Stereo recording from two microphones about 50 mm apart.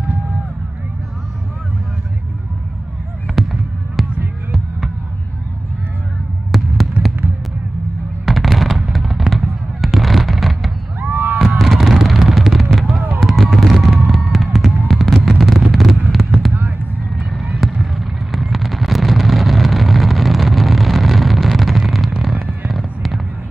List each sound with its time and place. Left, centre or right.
3.3 s fireworks: centre
4.5 s a sound: centre
6.5 s fireworks: centre
7.0 s fireworks: right
8.3 s fireworks: centre
11.0 s a sound: right
11.3 s fireworks: centre
12.1 s a sound: centre
13.2 s fireworks: centre
17.3 s fireworks: centre